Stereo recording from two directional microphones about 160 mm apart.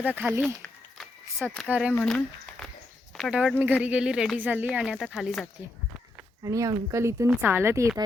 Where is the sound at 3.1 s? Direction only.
5° left (ahead or behind).